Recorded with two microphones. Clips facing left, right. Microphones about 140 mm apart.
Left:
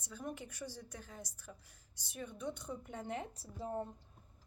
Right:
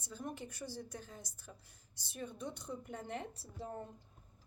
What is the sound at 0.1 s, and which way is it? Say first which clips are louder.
A woman's voice: even; 35° right (ahead or behind).